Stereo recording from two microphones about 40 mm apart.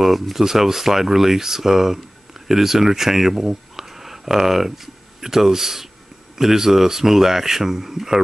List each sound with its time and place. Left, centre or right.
0.0 s speech: centre